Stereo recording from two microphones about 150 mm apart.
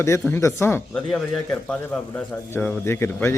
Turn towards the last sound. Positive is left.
turn(degrees=15)  # may be behind; listen again after turning